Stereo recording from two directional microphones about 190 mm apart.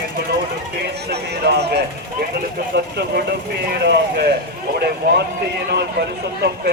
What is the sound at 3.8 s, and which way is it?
Speech, 65° right (ahead or behind).